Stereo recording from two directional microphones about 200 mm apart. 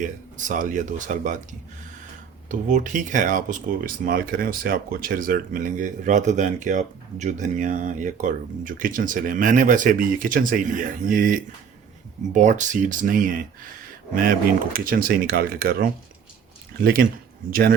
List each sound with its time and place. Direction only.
0.0 s speech: 40° right (ahead or behind)